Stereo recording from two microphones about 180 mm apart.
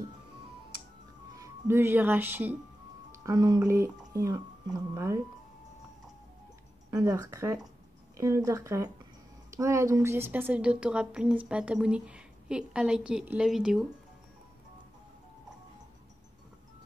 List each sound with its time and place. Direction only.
1.3 s speech: 15° right (ahead or behind)
6.9 s a woman's voice: 20° right (ahead or behind); by 13.8 s centre (ahead or behind)